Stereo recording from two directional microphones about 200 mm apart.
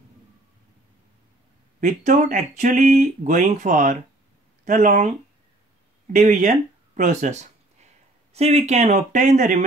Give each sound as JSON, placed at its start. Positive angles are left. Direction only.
{"t": 1.8, "sound": "speech", "side_deg": -40}
{"t": 6.1, "sound": "speech", "side_deg": -40}